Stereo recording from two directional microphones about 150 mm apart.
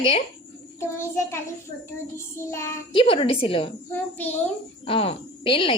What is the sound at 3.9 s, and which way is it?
Speech, 10° left (ahead or behind).